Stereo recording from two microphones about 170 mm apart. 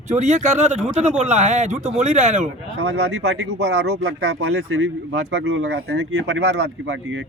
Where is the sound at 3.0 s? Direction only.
80° right.